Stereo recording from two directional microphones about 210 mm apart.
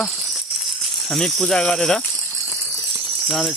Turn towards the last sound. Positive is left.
turn(degrees=0)  # may be behind; listen again after turning